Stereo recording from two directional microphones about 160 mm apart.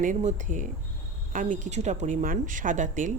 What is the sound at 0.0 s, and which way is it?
Speech, 50° right (ahead or behind).